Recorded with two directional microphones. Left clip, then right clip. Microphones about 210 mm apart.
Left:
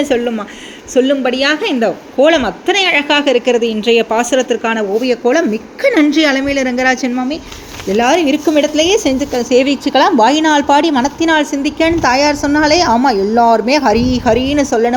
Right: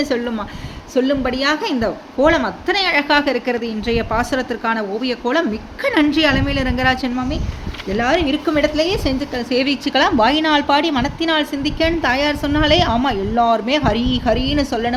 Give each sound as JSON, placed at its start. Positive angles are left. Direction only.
{"t": 0.0, "sound": "a woman's voice", "side_deg": 0}